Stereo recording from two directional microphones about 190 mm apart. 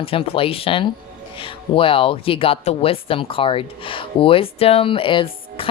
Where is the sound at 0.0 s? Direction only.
30° left (ahead or behind).